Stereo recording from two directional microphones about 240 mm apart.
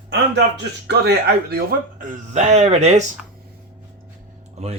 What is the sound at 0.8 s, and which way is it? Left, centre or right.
Speech, right.